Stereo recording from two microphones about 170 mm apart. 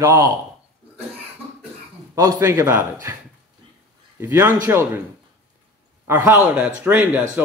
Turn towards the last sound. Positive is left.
turn(degrees=-10)  # may be behind; listen again after turning